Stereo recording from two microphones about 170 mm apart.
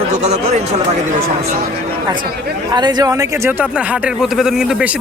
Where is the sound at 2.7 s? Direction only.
25° right (ahead or behind).